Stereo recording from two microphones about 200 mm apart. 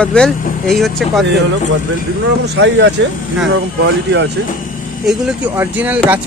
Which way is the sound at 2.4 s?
60° right (ahead or behind).